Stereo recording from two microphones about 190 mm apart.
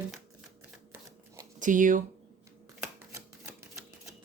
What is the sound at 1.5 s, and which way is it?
Speech, 45° right (ahead or behind).